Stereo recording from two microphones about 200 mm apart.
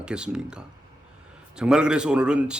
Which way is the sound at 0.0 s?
5° right (ahead or behind).